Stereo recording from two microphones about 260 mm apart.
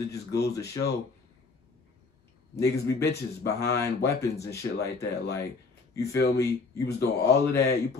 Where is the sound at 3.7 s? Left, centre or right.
Centre.